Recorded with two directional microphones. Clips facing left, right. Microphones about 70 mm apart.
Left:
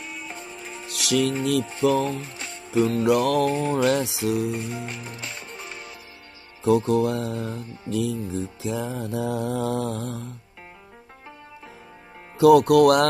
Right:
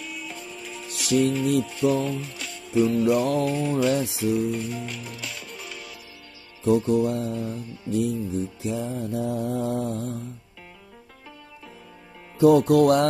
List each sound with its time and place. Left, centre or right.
0.0 s music: left
0.8 s music: left
1.6 s music: left
2.8 s mantra: left
3.1 s mantra: left
3.4 s mantra: left
3.9 s music: left
4.8 s music: left
6.6 s mantra: left
12.4 s speech: left